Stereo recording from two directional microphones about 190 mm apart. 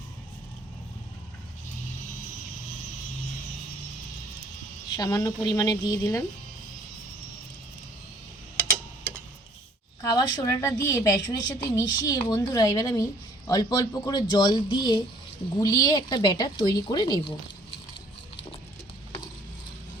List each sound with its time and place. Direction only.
4.9 s a woman's voice: 20° left (ahead or behind)
10.0 s a woman's voice: 20° left (ahead or behind)